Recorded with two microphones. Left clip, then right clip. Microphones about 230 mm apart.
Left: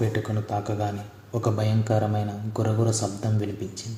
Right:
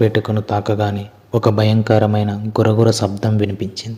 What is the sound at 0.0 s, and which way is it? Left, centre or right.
Speech, right.